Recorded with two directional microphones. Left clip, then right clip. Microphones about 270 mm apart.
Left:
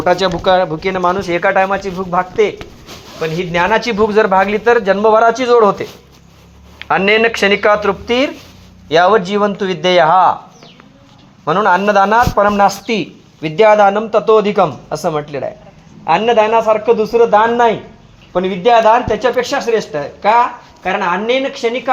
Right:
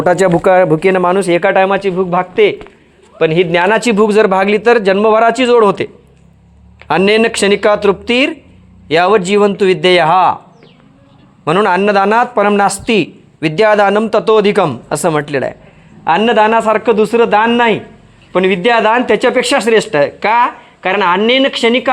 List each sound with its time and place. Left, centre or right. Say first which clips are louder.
0.0 s a man's voice: right 3 dB; right
3.2 s a man's voice: right 5 dB; right
11.4 s a man's voice: right 1 dB; right
19.0 s speech: right 4 dB; right